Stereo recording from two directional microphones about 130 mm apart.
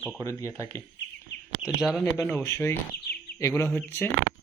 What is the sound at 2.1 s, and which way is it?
Speech, 10° left (ahead or behind).